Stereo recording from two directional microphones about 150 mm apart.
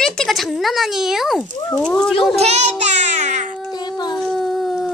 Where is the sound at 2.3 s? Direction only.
45° right (ahead or behind).